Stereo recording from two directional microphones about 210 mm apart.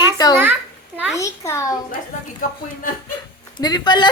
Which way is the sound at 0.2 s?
20° left (ahead or behind).